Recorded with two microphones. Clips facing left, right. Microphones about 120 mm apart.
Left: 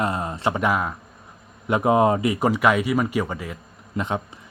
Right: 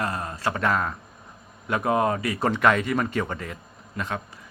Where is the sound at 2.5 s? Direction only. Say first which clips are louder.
Even; 10° left (ahead or behind).